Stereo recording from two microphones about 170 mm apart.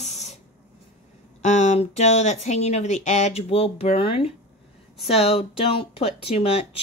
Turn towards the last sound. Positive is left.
turn(degrees=35)  # may be behind; listen again after turning